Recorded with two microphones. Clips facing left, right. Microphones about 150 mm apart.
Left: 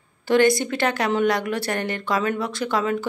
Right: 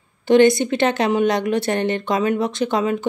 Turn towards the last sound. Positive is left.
turn(degrees=-20)  # may be behind; listen again after turning